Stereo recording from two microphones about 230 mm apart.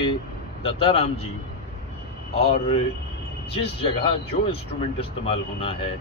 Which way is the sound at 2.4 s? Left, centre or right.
Left.